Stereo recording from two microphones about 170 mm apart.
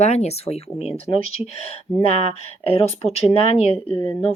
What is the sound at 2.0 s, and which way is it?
Speech, 40° left (ahead or behind).